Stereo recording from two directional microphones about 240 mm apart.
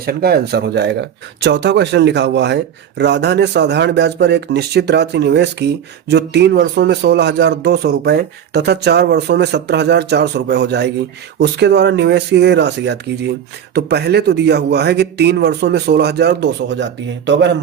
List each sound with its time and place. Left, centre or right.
0.0 s speech: right